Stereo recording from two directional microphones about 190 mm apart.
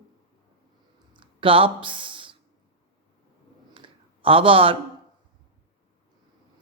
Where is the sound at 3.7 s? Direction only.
30° right (ahead or behind).